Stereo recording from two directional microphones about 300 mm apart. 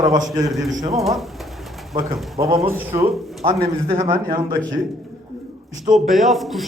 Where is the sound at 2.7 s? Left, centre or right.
Centre.